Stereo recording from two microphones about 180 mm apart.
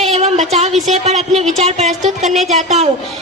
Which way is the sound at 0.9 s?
40° right (ahead or behind).